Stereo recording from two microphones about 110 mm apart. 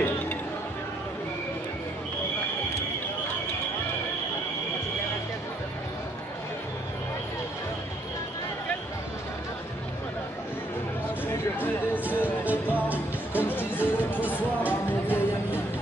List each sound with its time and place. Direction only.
12.0 s music: 15° right (ahead or behind)
12.6 s music: 15° left (ahead or behind)